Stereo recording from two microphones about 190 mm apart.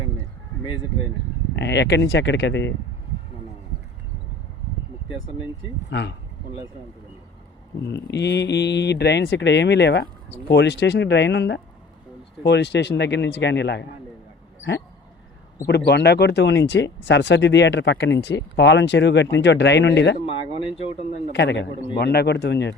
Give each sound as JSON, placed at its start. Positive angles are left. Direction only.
{"t": 1.5, "sound": "speech", "side_deg": 65}
{"t": 5.9, "sound": "speech", "side_deg": 65}
{"t": 7.9, "sound": "speech", "side_deg": 65}
{"t": 15.6, "sound": "speech", "side_deg": 60}
{"t": 20.2, "sound": "speech", "side_deg": 30}
{"t": 21.3, "sound": "speech", "side_deg": 65}